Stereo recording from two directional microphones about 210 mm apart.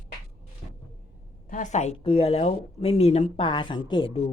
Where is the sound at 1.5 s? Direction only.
35° left (ahead or behind).